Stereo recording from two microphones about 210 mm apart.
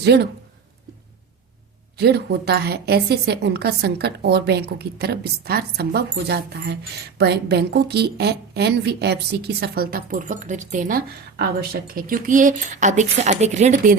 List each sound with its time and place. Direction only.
0.0 s a woman's voice: 55° right (ahead or behind)
2.0 s a woman's voice: 50° right (ahead or behind)